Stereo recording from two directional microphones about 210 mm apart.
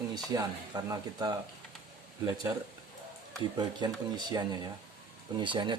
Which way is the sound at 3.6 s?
20° right (ahead or behind).